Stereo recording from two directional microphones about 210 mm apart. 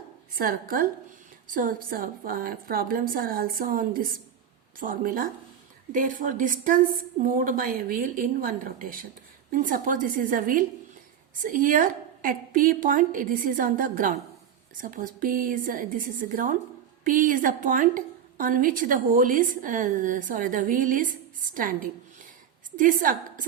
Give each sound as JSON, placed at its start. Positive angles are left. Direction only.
{"t": 0.3, "sound": "a woman's voice", "side_deg": -45}